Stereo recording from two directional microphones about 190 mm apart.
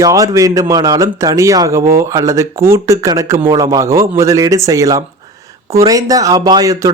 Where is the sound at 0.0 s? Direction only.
15° right (ahead or behind).